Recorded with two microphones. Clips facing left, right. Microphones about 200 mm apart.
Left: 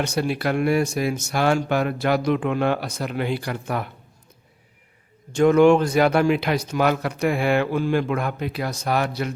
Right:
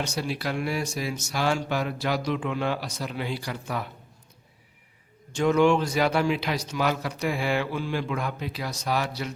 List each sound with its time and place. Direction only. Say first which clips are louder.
0.0 s a man's voice: left 6 dB; 60° left (ahead or behind)
5.3 s a man's voice: left 6 dB; 55° left (ahead or behind)